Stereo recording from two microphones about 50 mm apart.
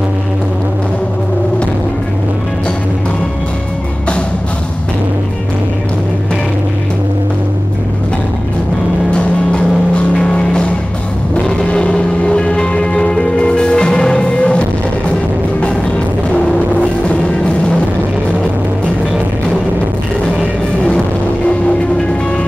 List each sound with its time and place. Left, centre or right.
10.1 s music: left